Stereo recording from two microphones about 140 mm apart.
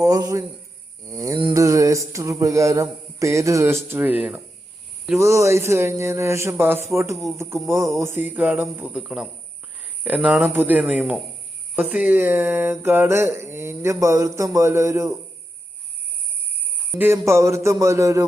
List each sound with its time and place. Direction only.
0.0 s mantra: 25° right (ahead or behind)
1.0 s music: 25° right (ahead or behind)
1.5 s mantra: 25° right (ahead or behind)
7.3 s speech: 20° right (ahead or behind)
17.0 s mantra: 20° right (ahead or behind)